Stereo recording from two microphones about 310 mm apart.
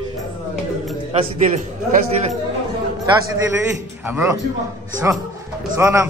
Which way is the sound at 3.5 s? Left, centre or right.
Centre.